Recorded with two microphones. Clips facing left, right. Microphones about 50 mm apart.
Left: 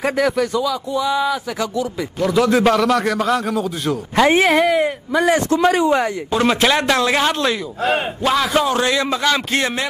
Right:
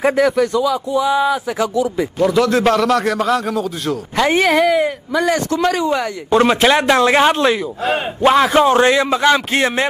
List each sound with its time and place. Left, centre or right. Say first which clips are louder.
0.0 s a man's voice: right 4 dB; centre
0.7 s speech: right 3 dB; centre
2.4 s a man's voice: even; centre
5.5 s speech: left 1 dB; left
6.4 s a man's voice: right 2 dB; centre